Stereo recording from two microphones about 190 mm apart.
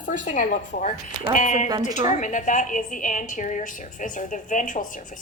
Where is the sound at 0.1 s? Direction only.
45° left (ahead or behind).